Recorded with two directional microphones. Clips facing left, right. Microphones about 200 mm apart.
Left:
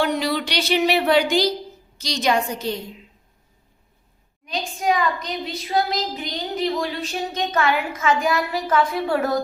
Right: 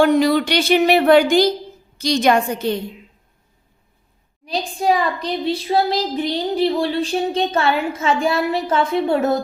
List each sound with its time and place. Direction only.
0.0 s a woman's voice: 50° right (ahead or behind)
4.4 s speech: 35° right (ahead or behind)